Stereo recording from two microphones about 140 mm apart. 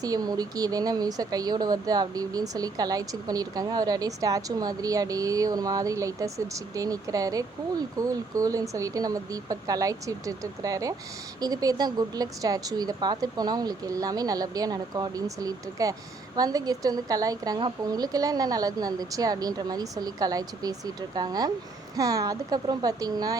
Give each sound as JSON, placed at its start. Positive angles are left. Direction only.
{"t": 0.0, "sound": "speech", "side_deg": -25}